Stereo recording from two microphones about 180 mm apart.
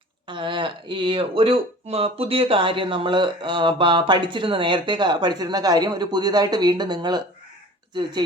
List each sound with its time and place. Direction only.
0.3 s speech: 25° right (ahead or behind)